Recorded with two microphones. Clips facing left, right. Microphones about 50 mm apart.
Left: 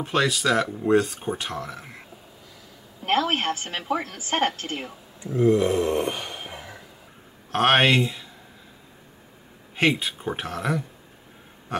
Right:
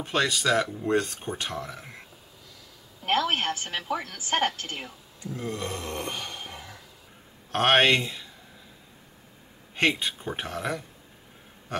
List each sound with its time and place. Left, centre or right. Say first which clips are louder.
0.0 s speech: left 3 dB; centre
3.0 s a woman's voice: left 2 dB; centre
5.2 s a sound: left 13 dB; centre
7.5 s speech: left 2 dB; centre
9.8 s speech: left 3 dB; centre